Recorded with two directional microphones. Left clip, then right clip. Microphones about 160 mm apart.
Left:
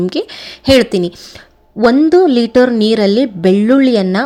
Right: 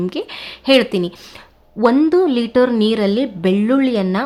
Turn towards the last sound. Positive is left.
turn(degrees=30)  # may be behind; listen again after turning